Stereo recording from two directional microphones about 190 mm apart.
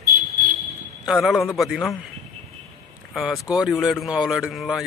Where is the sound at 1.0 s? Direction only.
Centre (ahead or behind).